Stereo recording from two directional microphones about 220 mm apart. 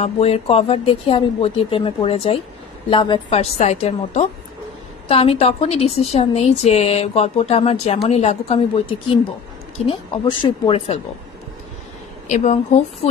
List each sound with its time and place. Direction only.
0.0 s a woman's voice: 30° left (ahead or behind)
12.3 s a woman's voice: 35° left (ahead or behind)